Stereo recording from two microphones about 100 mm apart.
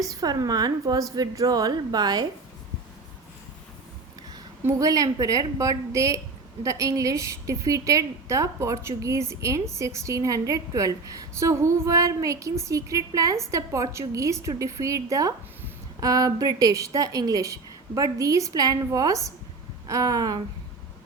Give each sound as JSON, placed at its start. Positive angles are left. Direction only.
{"t": 0.0, "sound": "a woman's voice", "side_deg": -35}
{"t": 4.6, "sound": "a woman's voice", "side_deg": -35}